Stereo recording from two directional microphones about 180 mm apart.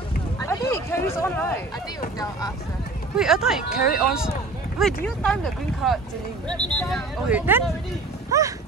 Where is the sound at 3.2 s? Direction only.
5° right (ahead or behind).